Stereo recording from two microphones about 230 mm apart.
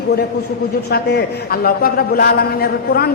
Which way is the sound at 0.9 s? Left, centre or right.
Left.